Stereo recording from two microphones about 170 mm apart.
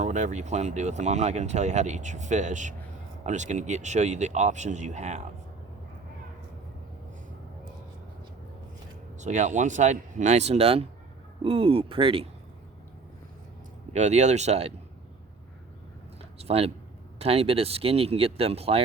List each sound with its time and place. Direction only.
0.0 s speech: 45° right (ahead or behind)
9.1 s speech: 45° right (ahead or behind)
13.9 s speech: 45° right (ahead or behind)
16.4 s speech: 35° right (ahead or behind)